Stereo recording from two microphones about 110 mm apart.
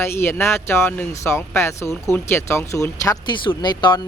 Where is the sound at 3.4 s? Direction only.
45° left (ahead or behind).